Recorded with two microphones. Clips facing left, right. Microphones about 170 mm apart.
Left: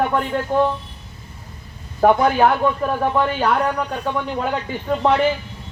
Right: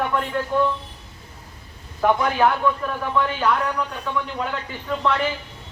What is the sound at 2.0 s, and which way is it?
Speech, 40° left (ahead or behind).